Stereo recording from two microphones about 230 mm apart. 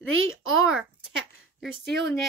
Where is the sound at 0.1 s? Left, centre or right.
Right.